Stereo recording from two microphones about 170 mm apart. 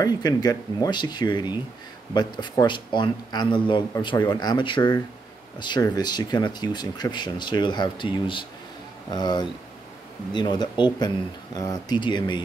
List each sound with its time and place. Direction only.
0.0 s speech: 25° left (ahead or behind)